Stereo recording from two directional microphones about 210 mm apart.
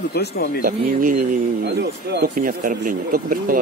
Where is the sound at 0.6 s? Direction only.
40° right (ahead or behind).